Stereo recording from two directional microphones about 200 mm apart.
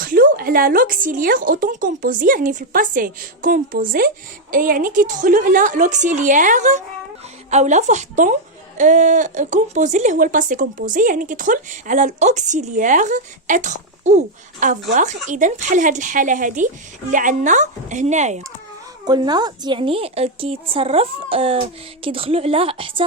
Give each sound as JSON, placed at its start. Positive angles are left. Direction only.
{"t": 0.0, "sound": "speech", "side_deg": -45}
{"t": 19.0, "sound": "a woman's voice", "side_deg": -20}